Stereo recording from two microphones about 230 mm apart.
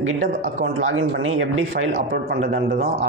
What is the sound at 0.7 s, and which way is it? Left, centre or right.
Speech, right.